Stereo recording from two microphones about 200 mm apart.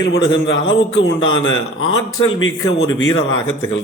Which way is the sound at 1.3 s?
85° left.